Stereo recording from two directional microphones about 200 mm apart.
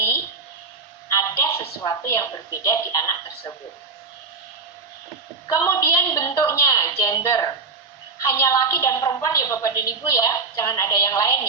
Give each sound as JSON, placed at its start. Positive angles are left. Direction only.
{"t": 1.1, "sound": "a sound", "side_deg": 15}
{"t": 2.6, "sound": "speech", "side_deg": 15}
{"t": 5.5, "sound": "a woman's voice", "side_deg": 15}